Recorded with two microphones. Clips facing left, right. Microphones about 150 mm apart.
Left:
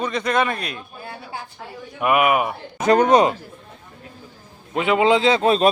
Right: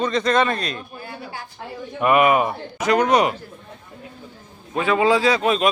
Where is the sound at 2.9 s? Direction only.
25° left (ahead or behind).